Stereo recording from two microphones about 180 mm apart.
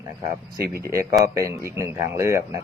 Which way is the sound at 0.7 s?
15° right (ahead or behind).